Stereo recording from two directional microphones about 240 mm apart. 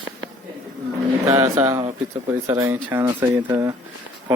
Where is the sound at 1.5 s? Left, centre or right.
Centre.